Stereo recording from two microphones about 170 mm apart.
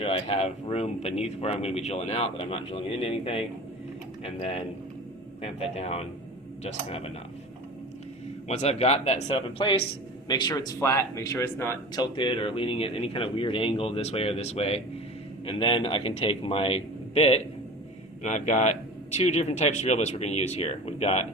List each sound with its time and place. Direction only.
0.0 s speech: 35° left (ahead or behind)
8.4 s speech: 40° left (ahead or behind); by 11.8 s 15° left (ahead or behind)
11.9 s speech: 30° left (ahead or behind)